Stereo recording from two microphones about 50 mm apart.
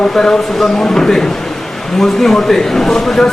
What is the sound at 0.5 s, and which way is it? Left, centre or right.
Speech, centre.